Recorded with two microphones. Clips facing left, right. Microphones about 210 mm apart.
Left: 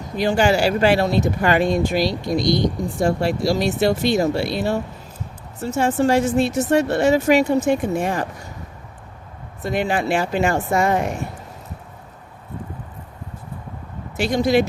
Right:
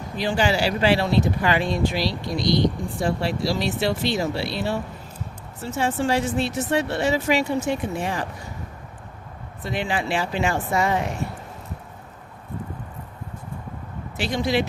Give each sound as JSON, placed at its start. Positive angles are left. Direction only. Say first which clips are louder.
{"t": 0.2, "sound": "speech", "louder": "left 5 dB", "side_deg": 50}
{"t": 9.6, "sound": "speech", "louder": "left 5 dB", "side_deg": 45}
{"t": 14.2, "sound": "speech", "louder": "left 6 dB", "side_deg": 45}